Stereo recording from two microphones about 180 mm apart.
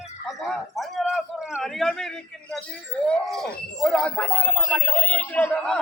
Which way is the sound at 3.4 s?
60° left (ahead or behind).